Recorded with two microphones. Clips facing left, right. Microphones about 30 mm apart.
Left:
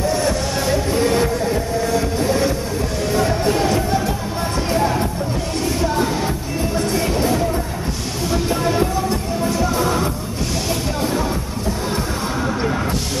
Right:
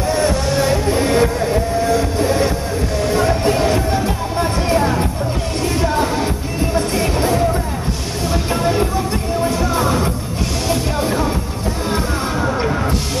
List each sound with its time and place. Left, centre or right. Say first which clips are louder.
0.2 s music: right 3 dB; centre
1.9 s vehicle: right 2 dB; centre
3.2 s music: right 1 dB; centre
8.5 s music: right 1 dB; centre